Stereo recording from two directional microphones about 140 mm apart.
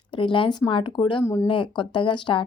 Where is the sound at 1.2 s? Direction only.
20° left (ahead or behind).